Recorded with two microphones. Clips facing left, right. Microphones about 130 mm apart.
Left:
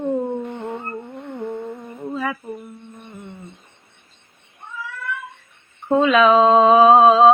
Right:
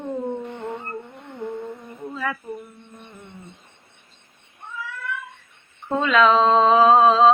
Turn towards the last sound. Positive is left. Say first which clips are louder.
# left 3 dB
turn(degrees=15)  # may be behind; listen again after turning